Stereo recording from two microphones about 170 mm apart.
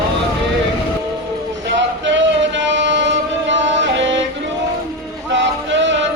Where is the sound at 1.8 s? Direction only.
90° right.